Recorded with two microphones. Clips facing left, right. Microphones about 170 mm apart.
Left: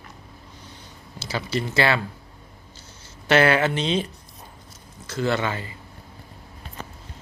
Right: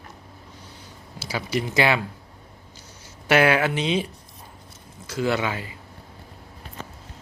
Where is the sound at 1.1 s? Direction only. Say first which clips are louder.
Even; 10° right (ahead or behind).